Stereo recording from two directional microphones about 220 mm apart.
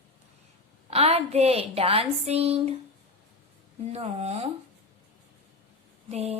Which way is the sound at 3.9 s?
30° right (ahead or behind).